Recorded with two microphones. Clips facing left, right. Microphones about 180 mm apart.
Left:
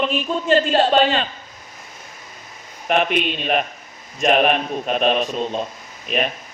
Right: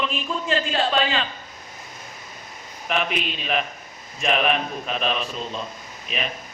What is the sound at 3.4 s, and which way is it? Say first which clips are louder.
A man's voice: left 5 dB; 45° left (ahead or behind).